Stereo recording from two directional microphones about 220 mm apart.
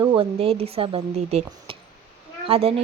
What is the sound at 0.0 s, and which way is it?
A woman's voice, 25° right (ahead or behind).